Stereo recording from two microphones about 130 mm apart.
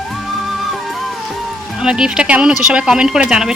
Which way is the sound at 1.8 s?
5° right (ahead or behind).